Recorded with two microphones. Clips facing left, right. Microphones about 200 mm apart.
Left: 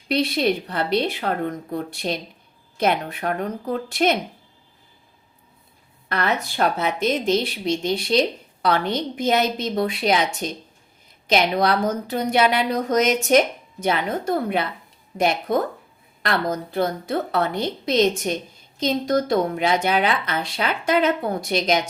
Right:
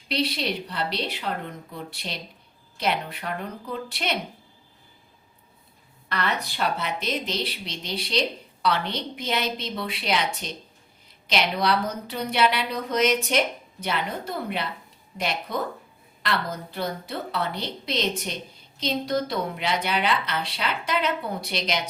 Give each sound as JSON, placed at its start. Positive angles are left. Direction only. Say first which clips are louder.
{"t": 0.1, "sound": "a woman's voice", "louder": "left 6 dB", "side_deg": 50}
{"t": 6.1, "sound": "a woman's voice", "louder": "left 4 dB", "side_deg": 45}